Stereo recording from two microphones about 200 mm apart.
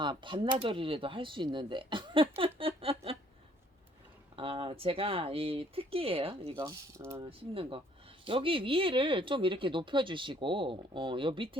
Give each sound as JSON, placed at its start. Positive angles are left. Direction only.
{"t": 0.0, "sound": "speech", "side_deg": -25}
{"t": 4.4, "sound": "speech", "side_deg": -25}
{"t": 6.6, "sound": "speech", "side_deg": -15}
{"t": 7.3, "sound": "speech", "side_deg": -25}